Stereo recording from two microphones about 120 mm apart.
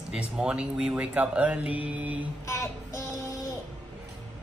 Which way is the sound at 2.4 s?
25° left (ahead or behind).